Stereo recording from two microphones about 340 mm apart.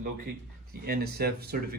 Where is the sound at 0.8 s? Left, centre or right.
Right.